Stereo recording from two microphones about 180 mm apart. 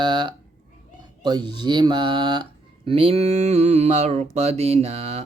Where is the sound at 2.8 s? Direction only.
30° right (ahead or behind).